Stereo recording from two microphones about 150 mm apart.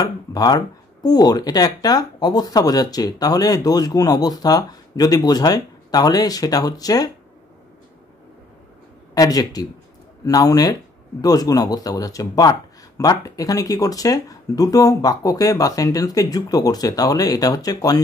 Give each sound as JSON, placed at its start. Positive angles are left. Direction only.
{"t": 0.0, "sound": "speech", "side_deg": 25}
{"t": 9.1, "sound": "speech", "side_deg": 25}